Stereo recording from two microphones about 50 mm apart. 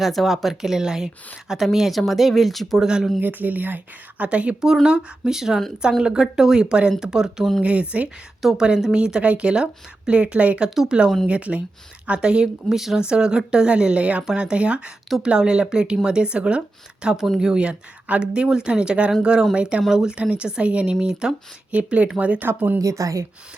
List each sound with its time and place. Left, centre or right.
0.0 s speech: centre
2.8 s speech: centre
3.2 s speech: right
4.2 s speech: right
4.6 s speech: centre
7.6 s speech: right
8.4 s speech: centre
8.6 s speech: centre
13.0 s speech: centre
20.1 s speech: right
21.0 s speech: centre
21.7 s speech: right
22.4 s speech: right
22.8 s a woman's voice: right